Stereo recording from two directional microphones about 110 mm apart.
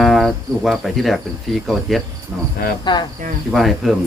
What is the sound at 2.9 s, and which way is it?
Speech, 45° left (ahead or behind).